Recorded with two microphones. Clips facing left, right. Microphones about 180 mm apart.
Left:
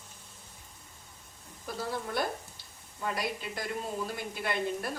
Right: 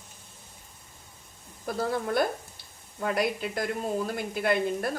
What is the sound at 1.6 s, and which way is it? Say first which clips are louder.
A woman's voice: right 7 dB; 55° right (ahead or behind).